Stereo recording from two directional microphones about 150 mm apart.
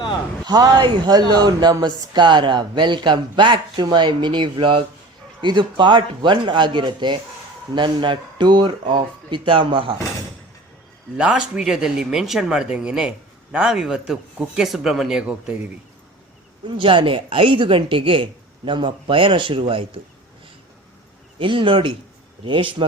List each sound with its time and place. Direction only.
0.4 s speech: 25° right (ahead or behind)
11.2 s speech: 5° right (ahead or behind)
16.6 s speech: 35° right (ahead or behind)
21.3 s speech: 35° right (ahead or behind)